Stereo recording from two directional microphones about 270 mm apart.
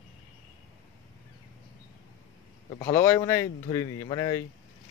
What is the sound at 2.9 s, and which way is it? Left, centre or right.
Speech, centre.